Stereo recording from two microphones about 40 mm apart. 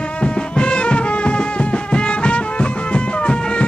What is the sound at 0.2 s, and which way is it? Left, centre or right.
Music, left.